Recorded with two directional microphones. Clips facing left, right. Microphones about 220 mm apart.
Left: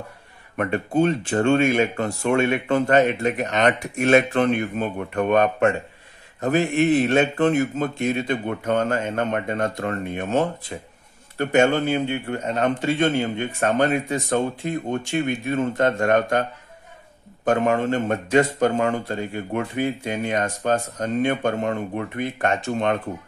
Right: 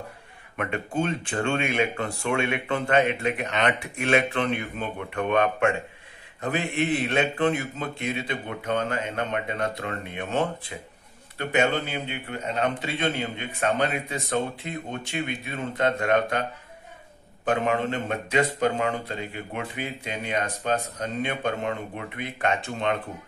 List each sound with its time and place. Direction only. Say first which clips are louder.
0.6 s a man's voice: left 7 dB; 40° left (ahead or behind)
17.5 s a man's voice: left 5 dB; 45° left (ahead or behind)